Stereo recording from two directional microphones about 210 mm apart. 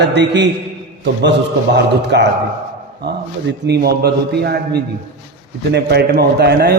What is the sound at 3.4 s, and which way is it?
A man's voice, 55° right (ahead or behind).